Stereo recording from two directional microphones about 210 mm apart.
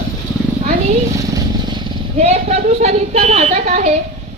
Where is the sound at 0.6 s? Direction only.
35° right (ahead or behind).